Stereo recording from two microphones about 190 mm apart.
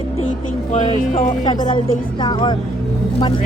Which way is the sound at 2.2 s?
25° left (ahead or behind).